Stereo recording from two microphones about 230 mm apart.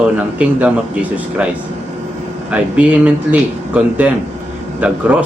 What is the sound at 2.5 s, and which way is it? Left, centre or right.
A man's voice, centre.